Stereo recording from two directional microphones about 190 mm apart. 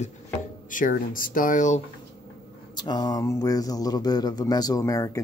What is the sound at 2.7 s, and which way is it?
Speech, 20° left (ahead or behind).